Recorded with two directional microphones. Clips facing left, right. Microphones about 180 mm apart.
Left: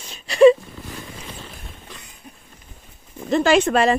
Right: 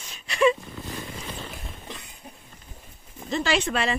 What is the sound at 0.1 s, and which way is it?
Wail, 35° left (ahead or behind).